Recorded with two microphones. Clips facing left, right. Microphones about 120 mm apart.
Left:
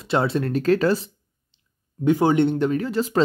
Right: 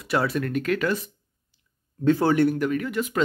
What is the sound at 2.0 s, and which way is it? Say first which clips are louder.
Speech: left 2 dB; 15° left (ahead or behind).